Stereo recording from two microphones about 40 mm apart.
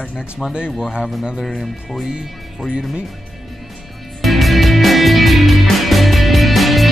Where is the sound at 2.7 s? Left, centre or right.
Right.